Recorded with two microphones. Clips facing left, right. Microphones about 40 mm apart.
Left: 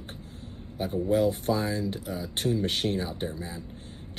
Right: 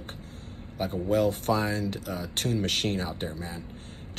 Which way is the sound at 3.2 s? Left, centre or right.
Right.